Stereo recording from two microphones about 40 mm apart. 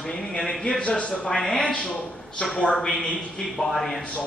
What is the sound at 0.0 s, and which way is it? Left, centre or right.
Speech, centre.